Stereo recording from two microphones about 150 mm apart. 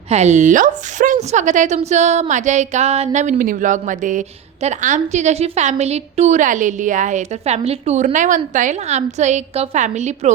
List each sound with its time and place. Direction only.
0.1 s a woman's voice: 50° right (ahead or behind)